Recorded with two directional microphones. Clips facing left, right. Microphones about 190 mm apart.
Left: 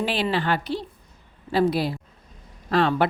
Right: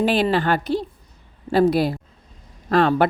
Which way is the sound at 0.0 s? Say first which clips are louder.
Right 5 dB; 45° right (ahead or behind).